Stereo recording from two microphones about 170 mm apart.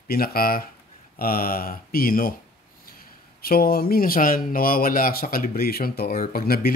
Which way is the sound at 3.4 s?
60° left (ahead or behind).